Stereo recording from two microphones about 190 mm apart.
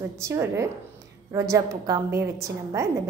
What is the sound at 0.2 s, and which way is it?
A woman's voice, 15° right (ahead or behind).